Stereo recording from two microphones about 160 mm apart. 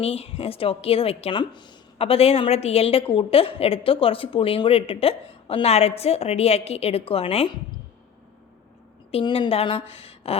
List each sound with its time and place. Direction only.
0.0 s a woman's voice: 40° left (ahead or behind)
9.1 s a woman's voice: 30° left (ahead or behind)